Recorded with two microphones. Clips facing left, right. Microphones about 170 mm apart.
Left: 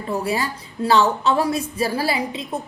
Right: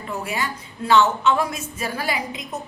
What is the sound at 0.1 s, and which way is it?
A woman's voice, 35° left (ahead or behind).